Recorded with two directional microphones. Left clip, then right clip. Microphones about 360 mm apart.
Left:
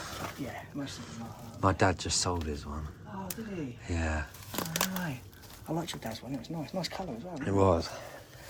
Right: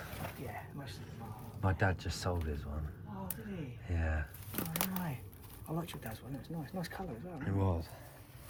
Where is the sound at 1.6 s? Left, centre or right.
Centre.